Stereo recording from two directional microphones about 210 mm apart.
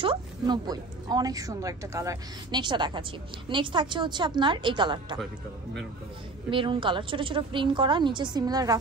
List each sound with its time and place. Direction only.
0.0 s a woman's voice: 20° right (ahead or behind)
6.5 s a woman's voice: 25° right (ahead or behind)